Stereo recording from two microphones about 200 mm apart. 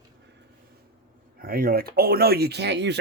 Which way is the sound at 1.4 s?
50° right (ahead or behind).